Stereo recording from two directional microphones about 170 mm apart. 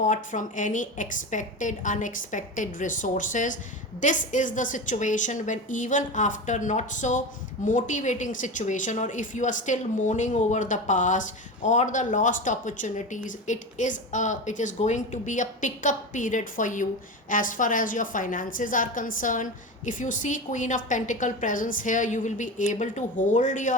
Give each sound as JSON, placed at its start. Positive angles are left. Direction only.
{"t": 0.0, "sound": "a woman's voice", "side_deg": 45}